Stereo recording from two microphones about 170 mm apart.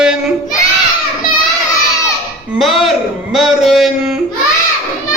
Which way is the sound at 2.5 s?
Centre (ahead or behind).